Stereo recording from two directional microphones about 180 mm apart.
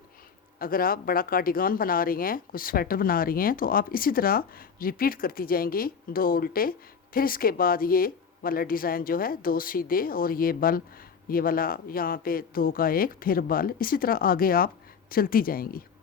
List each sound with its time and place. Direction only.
0.6 s speech: 50° left (ahead or behind)